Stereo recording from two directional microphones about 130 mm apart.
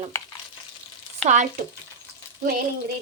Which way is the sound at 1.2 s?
65° right (ahead or behind).